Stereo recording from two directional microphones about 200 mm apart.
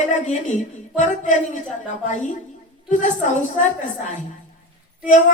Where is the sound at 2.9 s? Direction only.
40° left (ahead or behind).